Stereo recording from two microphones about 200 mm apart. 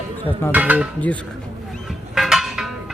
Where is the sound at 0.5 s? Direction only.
10° right (ahead or behind).